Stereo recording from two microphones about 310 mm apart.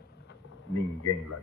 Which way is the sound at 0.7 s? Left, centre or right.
Left.